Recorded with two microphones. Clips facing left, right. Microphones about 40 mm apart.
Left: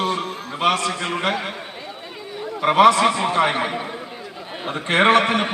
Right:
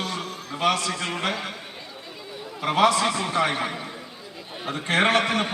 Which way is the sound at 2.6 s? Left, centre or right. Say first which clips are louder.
Left 6 dB; left.